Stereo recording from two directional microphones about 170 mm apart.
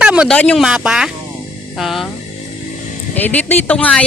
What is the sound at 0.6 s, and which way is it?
A woman's voice, 5° right (ahead or behind).